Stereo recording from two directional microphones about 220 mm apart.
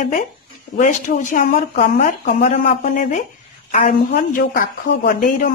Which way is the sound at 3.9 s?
40° left (ahead or behind).